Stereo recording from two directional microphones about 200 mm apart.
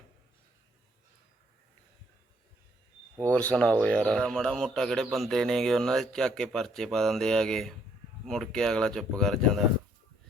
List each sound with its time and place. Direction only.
3.2 s a man's voice: 5° left (ahead or behind)